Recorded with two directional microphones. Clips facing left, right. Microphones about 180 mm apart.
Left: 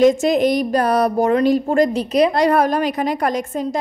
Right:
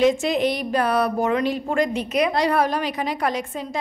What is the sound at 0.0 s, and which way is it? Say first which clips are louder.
A woman's voice: left 5 dB; 45° left (ahead or behind).